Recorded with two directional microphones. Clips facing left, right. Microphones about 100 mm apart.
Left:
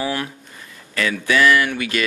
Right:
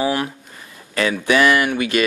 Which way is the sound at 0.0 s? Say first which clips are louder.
Right 4 dB; 25° right (ahead or behind).